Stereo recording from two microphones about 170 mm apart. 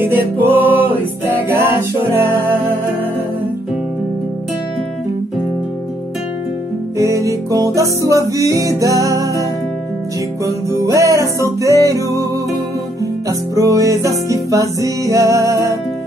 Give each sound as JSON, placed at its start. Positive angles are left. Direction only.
{"t": 0.1, "sound": "music", "side_deg": -10}
{"t": 7.0, "sound": "music", "side_deg": -20}
{"t": 10.4, "sound": "music", "side_deg": -20}
{"t": 13.3, "sound": "music", "side_deg": -20}